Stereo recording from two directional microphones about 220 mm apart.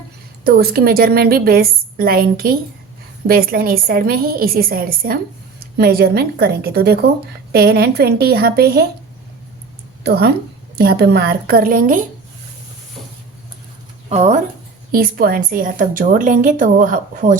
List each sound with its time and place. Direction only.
0.4 s a woman's voice: 45° right (ahead or behind)
10.0 s a woman's voice: 45° right (ahead or behind)
14.1 s a woman's voice: 30° right (ahead or behind)
14.9 s a woman's voice: 40° right (ahead or behind)